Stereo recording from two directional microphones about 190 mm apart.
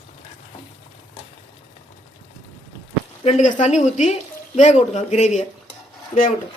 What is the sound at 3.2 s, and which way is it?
Speech, 40° left (ahead or behind).